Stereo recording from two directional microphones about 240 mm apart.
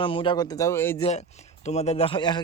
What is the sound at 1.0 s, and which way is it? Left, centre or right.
A man's voice, left.